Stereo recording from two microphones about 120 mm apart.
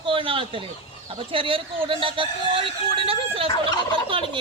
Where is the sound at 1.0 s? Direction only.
45° right (ahead or behind).